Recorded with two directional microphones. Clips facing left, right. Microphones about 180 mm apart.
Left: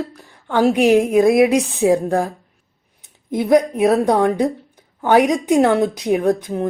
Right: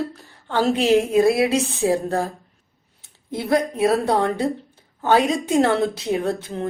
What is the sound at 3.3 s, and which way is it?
A woman's voice, 15° left (ahead or behind).